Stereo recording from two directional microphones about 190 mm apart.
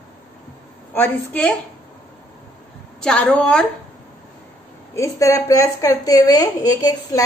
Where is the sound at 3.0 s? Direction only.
5° left (ahead or behind).